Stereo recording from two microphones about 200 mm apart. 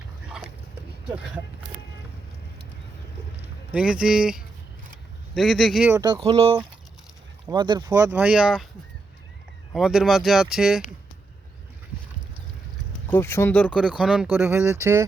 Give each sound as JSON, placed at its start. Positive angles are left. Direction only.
{"t": 3.7, "sound": "speech", "side_deg": -5}
{"t": 5.9, "sound": "speech", "side_deg": -20}
{"t": 9.7, "sound": "speech", "side_deg": 0}
{"t": 13.1, "sound": "speech", "side_deg": 10}